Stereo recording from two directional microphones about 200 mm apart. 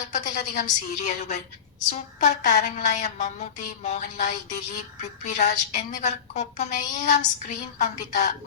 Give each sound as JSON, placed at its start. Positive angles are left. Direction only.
{"t": 0.1, "sound": "a woman's voice", "side_deg": 40}